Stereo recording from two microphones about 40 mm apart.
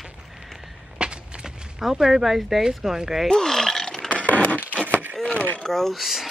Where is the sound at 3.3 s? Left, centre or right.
Centre.